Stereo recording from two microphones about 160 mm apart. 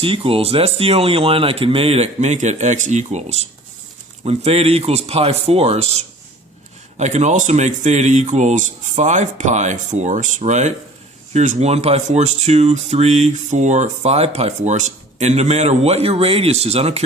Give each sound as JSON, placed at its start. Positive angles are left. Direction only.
{"t": 0.0, "sound": "speech", "side_deg": -35}